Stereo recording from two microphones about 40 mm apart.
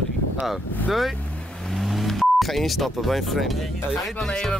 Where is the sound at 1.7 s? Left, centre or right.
Centre.